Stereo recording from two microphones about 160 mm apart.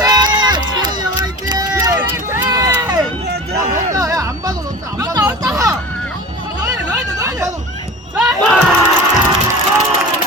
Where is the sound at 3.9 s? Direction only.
20° right (ahead or behind).